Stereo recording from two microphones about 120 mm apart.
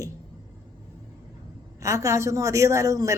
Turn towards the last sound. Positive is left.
turn(degrees=-25)  # may be behind; listen again after turning